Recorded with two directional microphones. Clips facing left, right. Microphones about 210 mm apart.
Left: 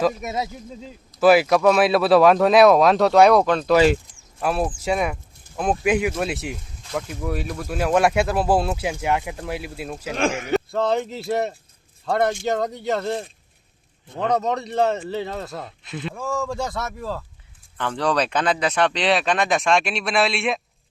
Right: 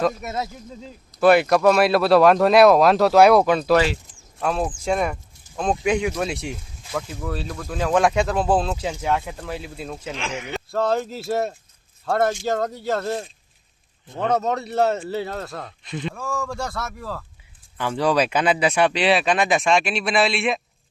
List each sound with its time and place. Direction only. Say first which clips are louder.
0.0 s speech: left 1 dB; 10° left (ahead or behind)
1.2 s speech: even; 5° left (ahead or behind)
4.4 s speech: left 1 dB; 5° left (ahead or behind)
10.2 s speech: left 12 dB; 50° left (ahead or behind)
10.7 s speech: even; centre (ahead or behind)
16.2 s a man's voice: left 6 dB; 20° left (ahead or behind)
17.7 s speech: right 2 dB; 5° right (ahead or behind)